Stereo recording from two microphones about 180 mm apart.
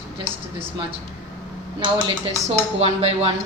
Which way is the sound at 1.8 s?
30° right (ahead or behind).